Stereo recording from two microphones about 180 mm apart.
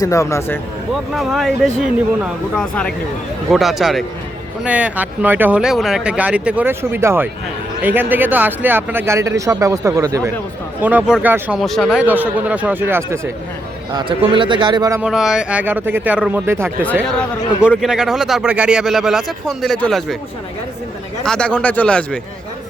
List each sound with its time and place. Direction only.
0.0 s speech: 15° left (ahead or behind)
1.1 s speech: centre (ahead or behind)
11.6 s speech: centre (ahead or behind)
13.9 s a man's voice: 25° right (ahead or behind)
15.0 s speech: centre (ahead or behind)
21.2 s speech: 5° left (ahead or behind)